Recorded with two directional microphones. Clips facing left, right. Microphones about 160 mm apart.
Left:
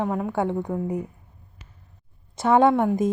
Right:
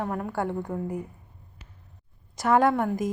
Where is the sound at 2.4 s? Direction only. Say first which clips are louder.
Left 4 dB; 25° left (ahead or behind).